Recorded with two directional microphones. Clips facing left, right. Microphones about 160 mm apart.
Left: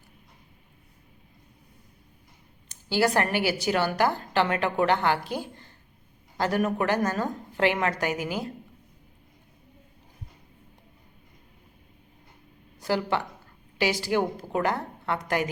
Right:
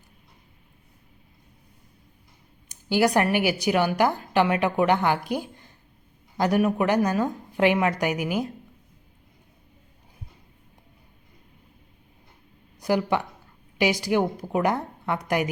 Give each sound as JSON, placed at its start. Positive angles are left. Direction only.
{"t": 2.6, "sound": "a woman's voice", "side_deg": -15}
{"t": 12.8, "sound": "a woman's voice", "side_deg": -15}